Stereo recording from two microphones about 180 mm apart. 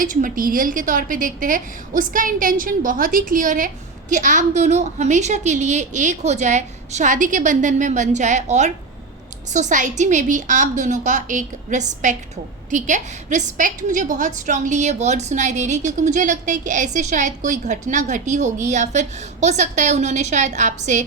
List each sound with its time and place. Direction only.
0.0 s a woman's voice: 50° right (ahead or behind)